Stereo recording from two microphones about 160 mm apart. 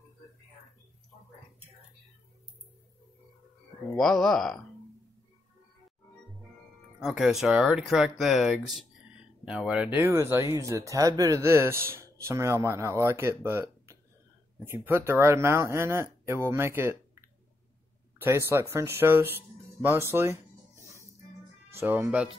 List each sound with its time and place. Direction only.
3.9 s speech: centre (ahead or behind)
7.0 s speech: centre (ahead or behind)
18.5 s speech: 15° right (ahead or behind)
21.6 s speech: 15° right (ahead or behind)